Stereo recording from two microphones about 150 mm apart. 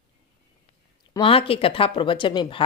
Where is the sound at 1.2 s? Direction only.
35° left (ahead or behind).